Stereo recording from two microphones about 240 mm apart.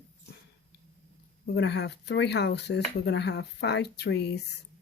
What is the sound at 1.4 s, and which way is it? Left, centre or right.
Speech, left.